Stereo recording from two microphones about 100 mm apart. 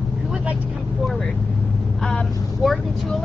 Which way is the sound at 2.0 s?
5° left (ahead or behind).